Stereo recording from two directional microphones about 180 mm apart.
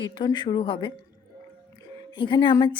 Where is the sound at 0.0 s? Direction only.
25° left (ahead or behind).